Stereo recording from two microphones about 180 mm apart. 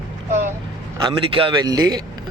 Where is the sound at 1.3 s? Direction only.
30° right (ahead or behind).